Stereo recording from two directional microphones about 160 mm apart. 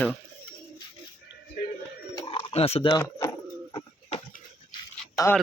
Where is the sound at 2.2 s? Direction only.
35° left (ahead or behind).